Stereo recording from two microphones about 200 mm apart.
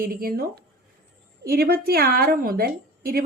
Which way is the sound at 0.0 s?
50° right (ahead or behind).